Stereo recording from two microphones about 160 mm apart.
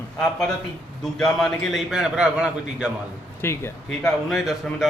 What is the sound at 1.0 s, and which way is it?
Speech, centre (ahead or behind).